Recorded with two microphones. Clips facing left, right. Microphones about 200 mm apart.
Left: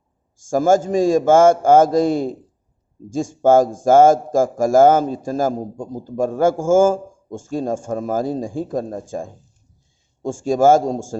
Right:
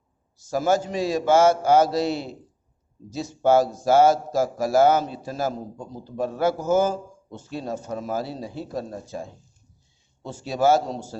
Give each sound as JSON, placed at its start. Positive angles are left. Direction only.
{"t": 0.3, "sound": "a man's voice", "side_deg": 45}